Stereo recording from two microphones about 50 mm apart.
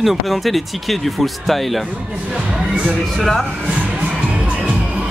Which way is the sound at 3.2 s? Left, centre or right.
Centre.